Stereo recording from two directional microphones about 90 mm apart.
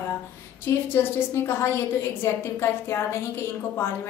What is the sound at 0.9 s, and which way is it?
Speech, 25° left (ahead or behind).